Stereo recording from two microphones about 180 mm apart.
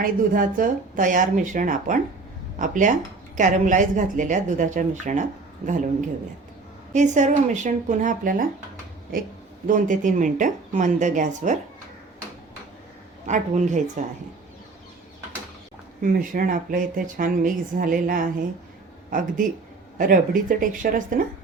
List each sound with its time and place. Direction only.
0.0 s speech: 50° right (ahead or behind)
6.9 s speech: 40° right (ahead or behind)
9.6 s speech: 45° right (ahead or behind)
13.2 s speech: 40° right (ahead or behind)
16.0 s speech: 50° right (ahead or behind)